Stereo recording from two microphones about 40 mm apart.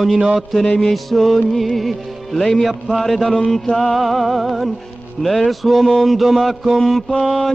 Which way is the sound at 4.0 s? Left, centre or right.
Centre.